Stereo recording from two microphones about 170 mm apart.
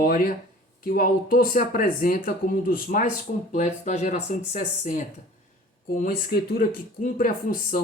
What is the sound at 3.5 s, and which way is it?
Speech, 45° left (ahead or behind).